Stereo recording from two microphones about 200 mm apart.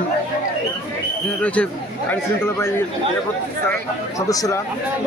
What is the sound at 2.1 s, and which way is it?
Speech, 10° left (ahead or behind).